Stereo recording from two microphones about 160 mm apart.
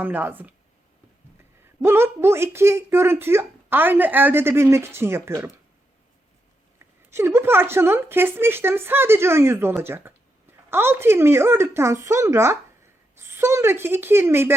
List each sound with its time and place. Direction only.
0.0 s speech: 10° right (ahead or behind)
1.8 s speech: 15° right (ahead or behind)
6.7 s speech: 15° right (ahead or behind)